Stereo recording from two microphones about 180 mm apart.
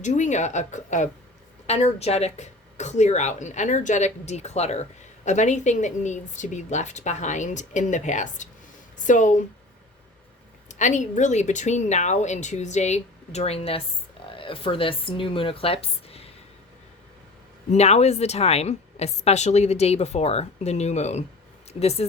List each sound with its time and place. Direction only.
0.0 s a woman's voice: 40° left (ahead or behind)
10.7 s speech: 40° left (ahead or behind)
17.7 s speech: 35° left (ahead or behind)